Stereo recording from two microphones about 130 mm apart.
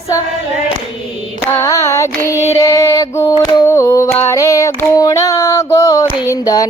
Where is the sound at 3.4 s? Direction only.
20° left (ahead or behind).